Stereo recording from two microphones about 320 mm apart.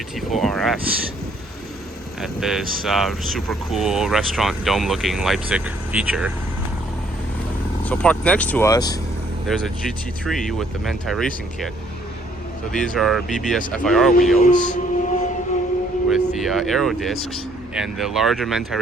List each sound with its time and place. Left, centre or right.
0.3 s speech: centre
2.2 s speech: centre
7.9 s speech: centre
12.7 s speech: centre
14.3 s speech: left
16.0 s speech: centre